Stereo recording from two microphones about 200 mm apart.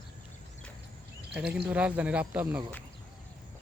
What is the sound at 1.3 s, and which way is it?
Speech, 5° right (ahead or behind).